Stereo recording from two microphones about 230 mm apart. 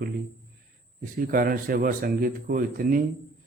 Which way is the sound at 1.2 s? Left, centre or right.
Right.